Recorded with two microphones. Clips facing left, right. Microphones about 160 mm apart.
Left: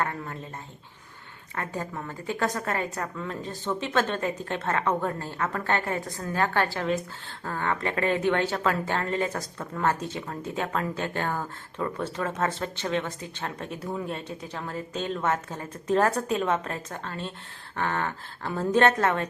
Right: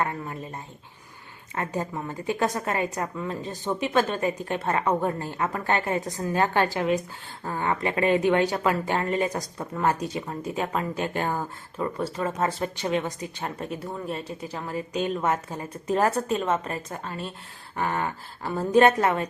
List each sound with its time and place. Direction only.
1.5 s speech: 20° right (ahead or behind)